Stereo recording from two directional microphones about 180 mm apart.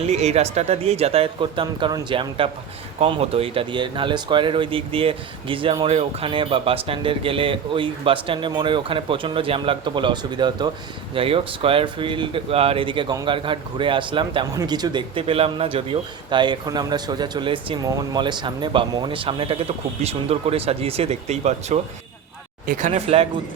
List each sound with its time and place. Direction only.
0.0 s speech: 35° right (ahead or behind)
22.9 s speech: 35° right (ahead or behind)